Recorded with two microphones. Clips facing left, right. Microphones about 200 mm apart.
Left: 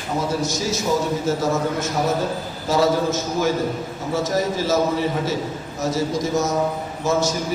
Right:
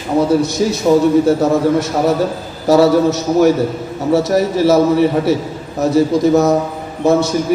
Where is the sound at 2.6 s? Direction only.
70° right (ahead or behind).